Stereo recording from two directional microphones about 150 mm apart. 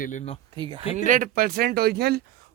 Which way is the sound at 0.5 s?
35° right (ahead or behind).